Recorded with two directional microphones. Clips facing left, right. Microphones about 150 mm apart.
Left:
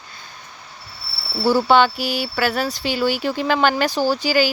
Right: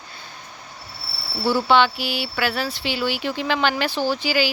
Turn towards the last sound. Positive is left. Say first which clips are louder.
# left 3 dB
turn(degrees=45)  # may be behind; listen again after turning